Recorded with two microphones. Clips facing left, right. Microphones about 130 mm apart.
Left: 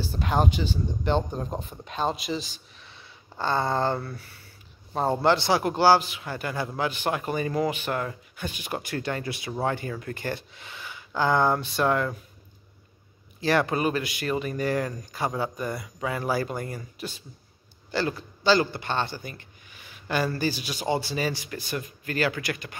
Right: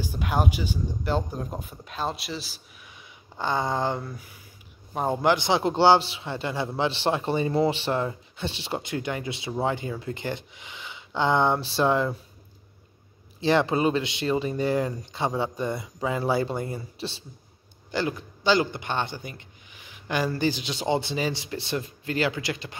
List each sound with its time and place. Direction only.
0.0 s a man's voice: 10° right (ahead or behind); by 12.2 s 25° right (ahead or behind)
13.4 s a man's voice: 25° right (ahead or behind)
17.9 s a man's voice: 15° right (ahead or behind)